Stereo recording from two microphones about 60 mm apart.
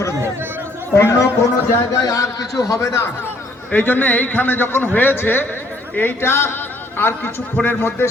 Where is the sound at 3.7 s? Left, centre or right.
Left.